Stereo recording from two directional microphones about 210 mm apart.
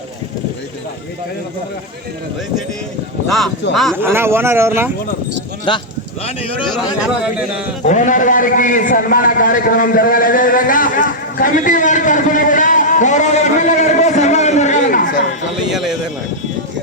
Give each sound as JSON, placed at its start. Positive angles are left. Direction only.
{"t": 3.2, "sound": "speech", "side_deg": 0}
{"t": 3.9, "sound": "speech", "side_deg": -10}
{"t": 5.7, "sound": "speech", "side_deg": 20}
{"t": 7.9, "sound": "a man's voice", "side_deg": 35}
{"t": 15.7, "sound": "speech", "side_deg": 0}